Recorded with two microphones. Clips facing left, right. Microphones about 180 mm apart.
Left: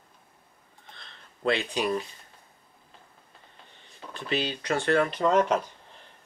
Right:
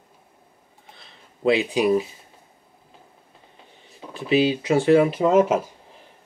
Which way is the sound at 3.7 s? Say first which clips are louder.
Right 4 dB; 5° right (ahead or behind).